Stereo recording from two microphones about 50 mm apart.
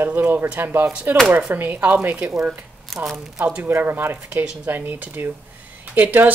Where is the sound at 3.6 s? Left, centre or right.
Right.